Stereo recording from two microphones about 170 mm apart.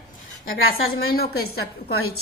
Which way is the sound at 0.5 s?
65° left (ahead or behind).